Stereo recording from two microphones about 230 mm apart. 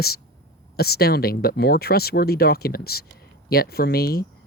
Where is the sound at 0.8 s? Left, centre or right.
Left.